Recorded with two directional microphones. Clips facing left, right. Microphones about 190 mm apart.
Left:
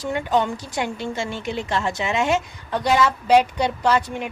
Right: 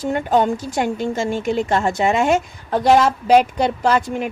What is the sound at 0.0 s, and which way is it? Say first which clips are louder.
A woman's voice: right 4 dB; 50° right (ahead or behind).